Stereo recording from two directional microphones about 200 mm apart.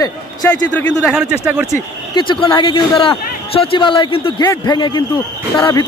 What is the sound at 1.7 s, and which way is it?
A man's voice, 20° left (ahead or behind).